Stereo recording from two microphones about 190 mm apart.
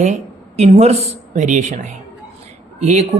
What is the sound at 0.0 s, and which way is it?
A woman's voice, 35° right (ahead or behind).